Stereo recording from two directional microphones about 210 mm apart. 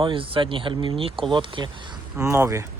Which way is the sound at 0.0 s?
25° right (ahead or behind).